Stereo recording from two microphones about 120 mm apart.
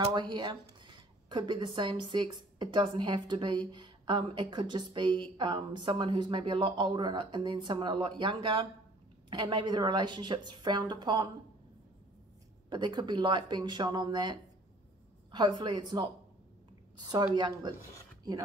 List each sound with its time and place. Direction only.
0.0 s a woman's voice: 40° right (ahead or behind)
12.6 s a woman's voice: 40° right (ahead or behind)